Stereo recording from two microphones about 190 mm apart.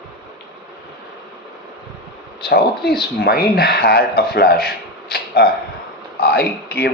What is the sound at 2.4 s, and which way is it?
Speech, 55° left (ahead or behind).